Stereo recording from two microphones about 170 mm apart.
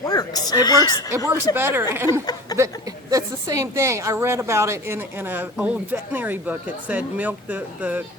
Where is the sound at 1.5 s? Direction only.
15° right (ahead or behind).